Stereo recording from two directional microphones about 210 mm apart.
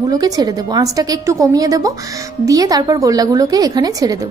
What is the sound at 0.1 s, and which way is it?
A woman's voice, 20° right (ahead or behind).